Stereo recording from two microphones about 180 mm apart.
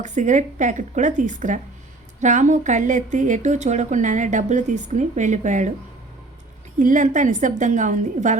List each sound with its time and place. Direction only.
0.0 s a woman's voice: 45° right (ahead or behind)
6.7 s a woman's voice: 45° right (ahead or behind)